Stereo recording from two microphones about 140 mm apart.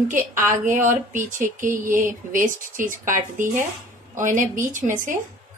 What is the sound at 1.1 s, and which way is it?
A woman's voice, 70° right (ahead or behind).